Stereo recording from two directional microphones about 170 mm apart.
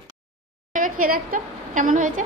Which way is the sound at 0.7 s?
55° right (ahead or behind).